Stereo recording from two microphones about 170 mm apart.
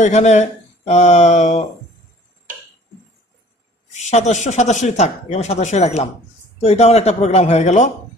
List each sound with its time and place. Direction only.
0.0 s speech: 45° left (ahead or behind)
3.9 s speech: 40° left (ahead or behind)